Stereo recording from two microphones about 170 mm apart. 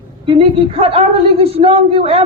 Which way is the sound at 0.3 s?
35° right (ahead or behind).